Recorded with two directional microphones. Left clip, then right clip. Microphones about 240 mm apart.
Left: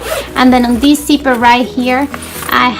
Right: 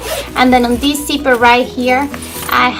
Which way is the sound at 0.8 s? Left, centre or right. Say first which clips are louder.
Left 5 dB; left.